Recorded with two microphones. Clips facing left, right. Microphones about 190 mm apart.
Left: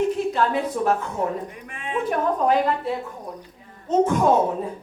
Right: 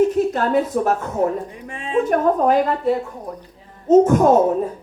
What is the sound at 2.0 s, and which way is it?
A woman's voice, 45° right (ahead or behind).